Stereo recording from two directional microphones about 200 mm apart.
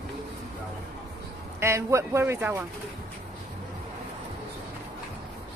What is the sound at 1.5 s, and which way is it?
Speech, 15° right (ahead or behind).